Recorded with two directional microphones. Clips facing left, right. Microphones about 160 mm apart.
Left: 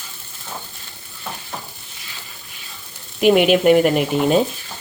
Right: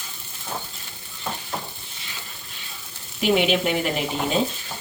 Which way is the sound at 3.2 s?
55° left (ahead or behind).